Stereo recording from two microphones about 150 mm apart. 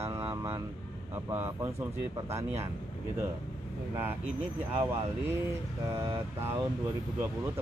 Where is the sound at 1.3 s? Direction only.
20° right (ahead or behind).